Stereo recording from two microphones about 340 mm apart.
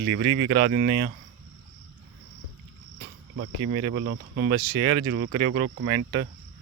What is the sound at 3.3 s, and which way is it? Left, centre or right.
Speech, right.